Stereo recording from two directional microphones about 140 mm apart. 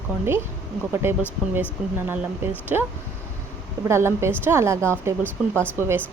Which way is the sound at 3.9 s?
20° right (ahead or behind).